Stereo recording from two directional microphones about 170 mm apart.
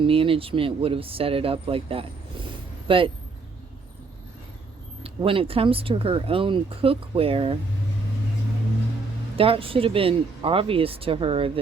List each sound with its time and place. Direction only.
0.0 s speech: 30° right (ahead or behind)
5.0 s speech: 30° right (ahead or behind)
9.4 s speech: 35° right (ahead or behind)